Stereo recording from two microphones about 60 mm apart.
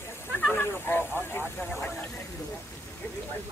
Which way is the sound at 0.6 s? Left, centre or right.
Left.